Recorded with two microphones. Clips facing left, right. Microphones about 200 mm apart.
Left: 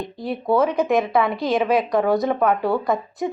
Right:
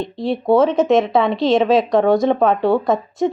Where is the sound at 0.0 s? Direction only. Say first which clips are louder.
Right 6 dB; 25° right (ahead or behind).